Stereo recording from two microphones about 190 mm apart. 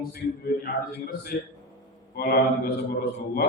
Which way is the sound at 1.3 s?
50° left (ahead or behind).